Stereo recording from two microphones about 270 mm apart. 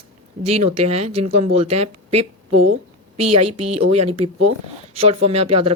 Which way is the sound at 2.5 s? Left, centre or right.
Right.